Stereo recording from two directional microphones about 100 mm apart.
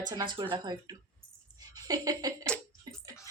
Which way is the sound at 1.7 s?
40° right (ahead or behind).